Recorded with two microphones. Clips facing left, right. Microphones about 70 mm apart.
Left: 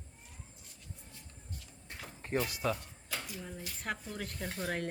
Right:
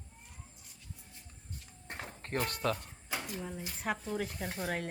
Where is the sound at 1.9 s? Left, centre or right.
Right.